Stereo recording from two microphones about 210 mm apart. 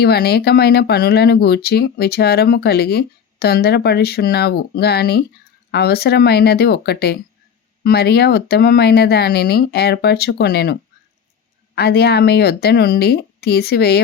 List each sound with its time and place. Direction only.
0.0 s speech: 50° left (ahead or behind)